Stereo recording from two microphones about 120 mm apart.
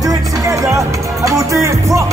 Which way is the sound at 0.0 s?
30° right (ahead or behind).